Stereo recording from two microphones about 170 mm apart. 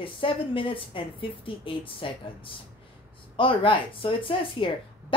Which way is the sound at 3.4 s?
30° left (ahead or behind).